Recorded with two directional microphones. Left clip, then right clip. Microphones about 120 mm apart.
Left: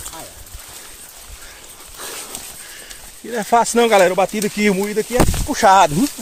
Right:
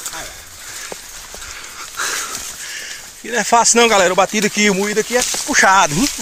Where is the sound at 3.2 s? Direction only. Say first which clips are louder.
Right 2 dB; 15° left (ahead or behind).